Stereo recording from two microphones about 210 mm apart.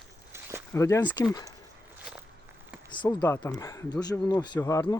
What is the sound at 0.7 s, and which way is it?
Speech, 15° left (ahead or behind).